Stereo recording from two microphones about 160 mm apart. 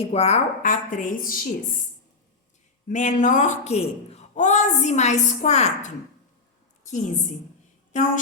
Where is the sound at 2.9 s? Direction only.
50° left (ahead or behind).